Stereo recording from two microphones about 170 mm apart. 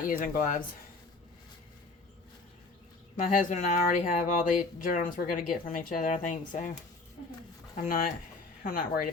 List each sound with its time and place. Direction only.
0.0 s speech: 55° left (ahead or behind)
3.2 s speech: 50° left (ahead or behind)
7.8 s speech: 50° left (ahead or behind)